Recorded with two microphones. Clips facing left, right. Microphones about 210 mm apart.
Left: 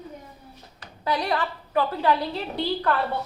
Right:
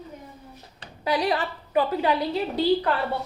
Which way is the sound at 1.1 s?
20° right (ahead or behind).